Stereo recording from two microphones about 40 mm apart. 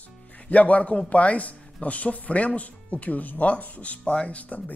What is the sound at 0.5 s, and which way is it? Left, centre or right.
Speech, left.